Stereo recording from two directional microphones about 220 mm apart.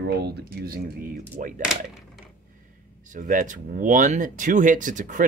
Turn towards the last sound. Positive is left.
turn(degrees=-35)  # may be behind; listen again after turning